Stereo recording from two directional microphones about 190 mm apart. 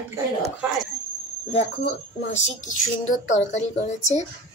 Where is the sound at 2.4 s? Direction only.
40° left (ahead or behind).